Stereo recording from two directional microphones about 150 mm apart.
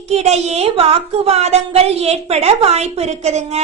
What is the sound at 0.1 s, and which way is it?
A woman's voice, 45° right (ahead or behind).